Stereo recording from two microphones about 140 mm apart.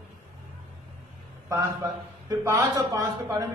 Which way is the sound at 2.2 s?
25° right (ahead or behind).